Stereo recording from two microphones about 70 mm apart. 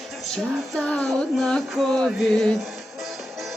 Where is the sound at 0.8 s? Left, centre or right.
Centre.